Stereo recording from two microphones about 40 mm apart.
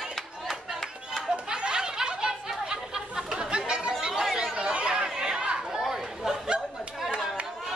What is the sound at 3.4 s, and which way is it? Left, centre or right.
Chatter, right.